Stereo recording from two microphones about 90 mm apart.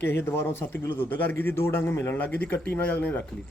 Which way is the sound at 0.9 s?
20° left (ahead or behind).